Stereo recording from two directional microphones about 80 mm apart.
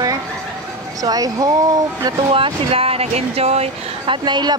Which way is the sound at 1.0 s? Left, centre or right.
Right.